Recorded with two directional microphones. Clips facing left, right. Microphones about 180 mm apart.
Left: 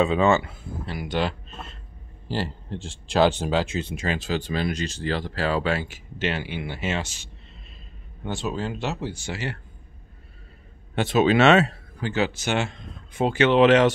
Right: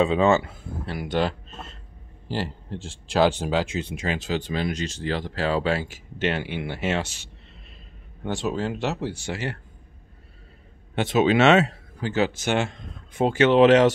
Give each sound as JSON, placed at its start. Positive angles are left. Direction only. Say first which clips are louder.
{"t": 0.0, "sound": "speech", "louder": "right 1 dB", "side_deg": -30}
{"t": 2.2, "sound": "speech", "louder": "left 1 dB", "side_deg": -15}
{"t": 11.0, "sound": "speech", "louder": "even", "side_deg": -20}
{"t": 12.0, "sound": "speech", "louder": "right 1 dB", "side_deg": -45}